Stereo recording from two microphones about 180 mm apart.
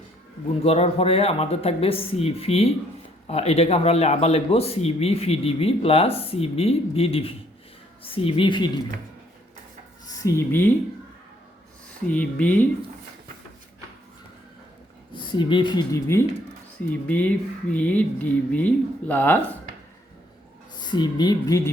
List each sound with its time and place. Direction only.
0.6 s a man's voice: 35° left (ahead or behind)
10.1 s speech: 15° left (ahead or behind)
12.1 s speech: 10° left (ahead or behind)
15.1 s speech: 25° left (ahead or behind); by 19.4 s 10° left (ahead or behind)
20.7 s speech: 25° left (ahead or behind)